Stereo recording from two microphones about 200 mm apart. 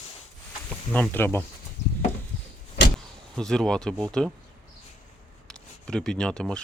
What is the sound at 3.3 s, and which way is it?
Speech, 5° left (ahead or behind).